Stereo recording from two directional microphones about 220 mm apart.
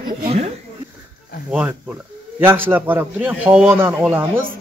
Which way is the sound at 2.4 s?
10° right (ahead or behind).